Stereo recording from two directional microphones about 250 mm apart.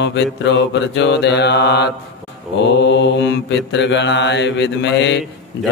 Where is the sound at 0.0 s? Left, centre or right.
Left.